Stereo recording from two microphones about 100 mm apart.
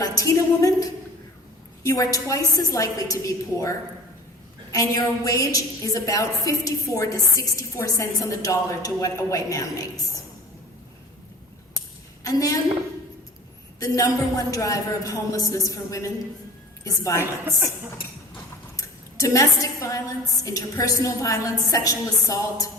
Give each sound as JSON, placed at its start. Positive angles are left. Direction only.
{"t": 0.0, "sound": "a sound", "side_deg": 35}
{"t": 1.8, "sound": "a woman's voice", "side_deg": 35}
{"t": 12.2, "sound": "a woman's voice", "side_deg": 35}
{"t": 13.7, "sound": "a woman's voice", "side_deg": 35}
{"t": 18.8, "sound": "a woman's voice", "side_deg": 35}